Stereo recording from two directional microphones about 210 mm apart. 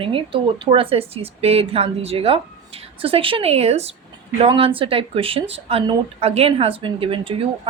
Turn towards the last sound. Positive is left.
turn(degrees=-25)  # may be behind; listen again after turning